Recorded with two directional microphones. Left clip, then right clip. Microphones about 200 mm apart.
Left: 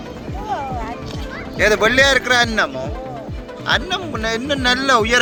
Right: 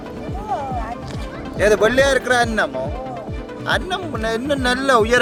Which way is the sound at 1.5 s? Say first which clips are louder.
Left 1 dB; 20° right (ahead or behind).